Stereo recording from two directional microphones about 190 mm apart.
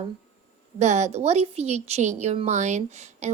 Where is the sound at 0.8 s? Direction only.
35° right (ahead or behind).